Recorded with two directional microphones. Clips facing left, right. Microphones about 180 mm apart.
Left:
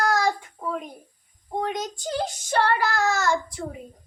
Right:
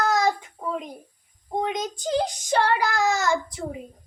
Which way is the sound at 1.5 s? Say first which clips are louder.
Right 1 dB; 20° right (ahead or behind).